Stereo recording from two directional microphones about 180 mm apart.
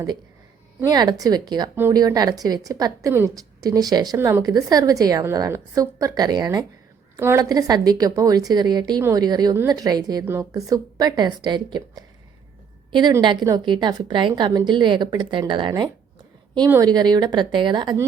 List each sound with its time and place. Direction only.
0.8 s a woman's voice: 20° right (ahead or behind)